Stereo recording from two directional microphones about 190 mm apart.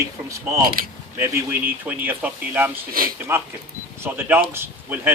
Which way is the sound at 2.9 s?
50° right (ahead or behind).